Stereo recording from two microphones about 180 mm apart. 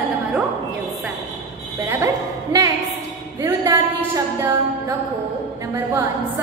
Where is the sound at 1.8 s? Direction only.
10° right (ahead or behind).